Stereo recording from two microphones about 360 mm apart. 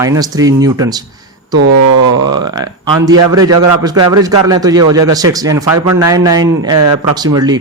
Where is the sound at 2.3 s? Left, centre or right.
Centre.